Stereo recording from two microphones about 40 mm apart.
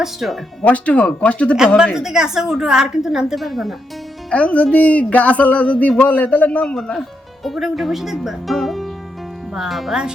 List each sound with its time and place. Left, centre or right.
0.0 s a woman's voice: centre
0.6 s speech: left
1.9 s a woman's voice: centre
4.3 s speech: left
7.4 s speech: centre